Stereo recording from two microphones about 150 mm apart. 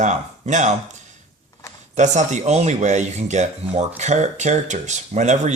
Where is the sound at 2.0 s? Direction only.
55° right (ahead or behind).